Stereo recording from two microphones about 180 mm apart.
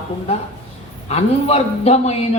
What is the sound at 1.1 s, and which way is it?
A man's voice, 35° left (ahead or behind).